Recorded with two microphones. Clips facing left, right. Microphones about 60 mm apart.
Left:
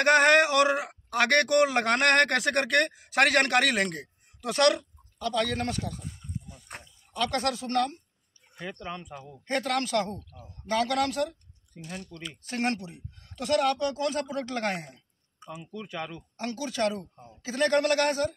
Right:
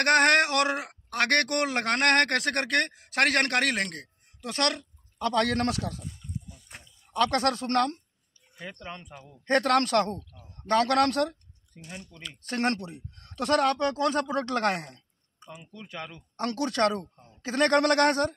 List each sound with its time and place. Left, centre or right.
0.0 s a man's voice: centre
5.2 s a man's voice: right
6.5 s a sound: left
7.2 s speech: right
8.8 s speech: centre
9.5 s a man's voice: right
11.9 s speech: centre
12.4 s a man's voice: right
15.6 s speech: centre
16.3 s a man's voice: right
17.1 s a man's voice: centre
17.5 s a man's voice: right